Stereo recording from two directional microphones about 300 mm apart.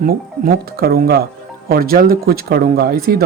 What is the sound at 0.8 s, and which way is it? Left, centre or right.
Speech, right.